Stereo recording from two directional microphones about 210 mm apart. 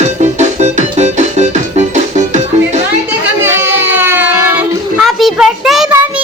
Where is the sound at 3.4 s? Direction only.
10° right (ahead or behind).